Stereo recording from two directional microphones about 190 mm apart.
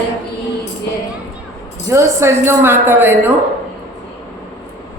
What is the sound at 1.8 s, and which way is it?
A woman's voice, 15° right (ahead or behind).